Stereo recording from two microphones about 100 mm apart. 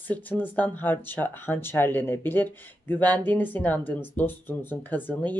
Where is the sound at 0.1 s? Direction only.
15° left (ahead or behind).